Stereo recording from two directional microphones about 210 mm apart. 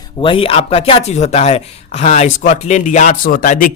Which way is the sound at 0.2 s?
25° left (ahead or behind).